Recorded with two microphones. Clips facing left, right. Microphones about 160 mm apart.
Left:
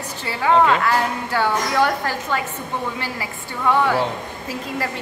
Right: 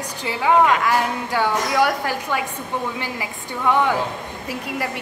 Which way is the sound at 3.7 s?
15° right (ahead or behind).